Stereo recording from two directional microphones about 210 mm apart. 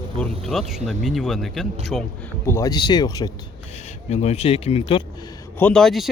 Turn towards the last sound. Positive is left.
turn(degrees=0)  # may be behind; listen again after turning